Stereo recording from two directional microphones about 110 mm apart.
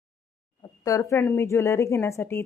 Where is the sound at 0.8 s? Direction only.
30° left (ahead or behind).